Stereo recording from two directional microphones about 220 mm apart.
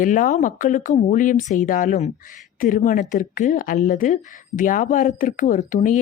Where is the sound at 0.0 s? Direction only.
35° left (ahead or behind).